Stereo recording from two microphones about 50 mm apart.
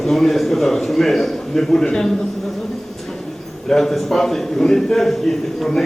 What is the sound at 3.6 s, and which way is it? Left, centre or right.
A man's voice, centre.